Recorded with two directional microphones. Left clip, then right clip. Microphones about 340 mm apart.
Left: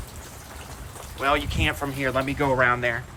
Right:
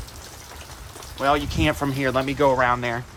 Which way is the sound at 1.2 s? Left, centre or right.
Centre.